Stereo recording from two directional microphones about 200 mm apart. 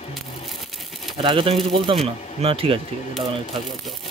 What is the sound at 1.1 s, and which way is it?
Speech, 25° right (ahead or behind).